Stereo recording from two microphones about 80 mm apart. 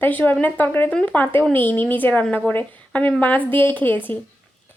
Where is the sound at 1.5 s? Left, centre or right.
Left.